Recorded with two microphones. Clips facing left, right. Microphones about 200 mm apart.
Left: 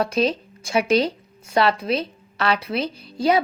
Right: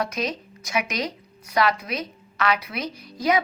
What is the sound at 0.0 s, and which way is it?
A woman's voice, 30° left (ahead or behind).